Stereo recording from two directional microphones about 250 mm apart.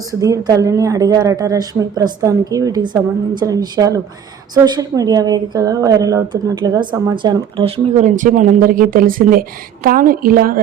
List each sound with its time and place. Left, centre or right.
0.1 s speech: centre; by 10.6 s right